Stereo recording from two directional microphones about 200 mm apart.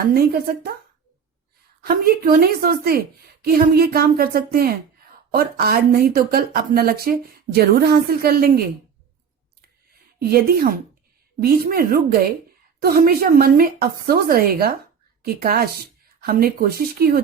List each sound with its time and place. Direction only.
0.1 s speech: 50° right (ahead or behind)
1.8 s speech: 50° right (ahead or behind)
10.2 s speech: 50° right (ahead or behind)